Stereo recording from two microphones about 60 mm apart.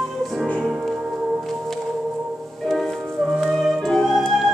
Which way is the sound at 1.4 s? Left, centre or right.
Centre.